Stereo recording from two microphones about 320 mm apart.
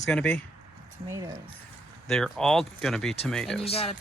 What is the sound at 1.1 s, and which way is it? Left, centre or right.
Speech, centre.